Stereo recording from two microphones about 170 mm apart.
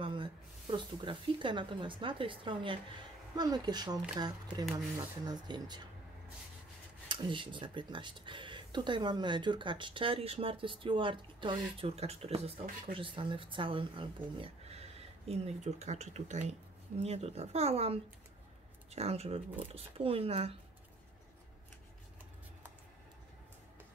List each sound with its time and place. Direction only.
0.0 s speech: 30° right (ahead or behind)
7.1 s speech: 30° right (ahead or behind)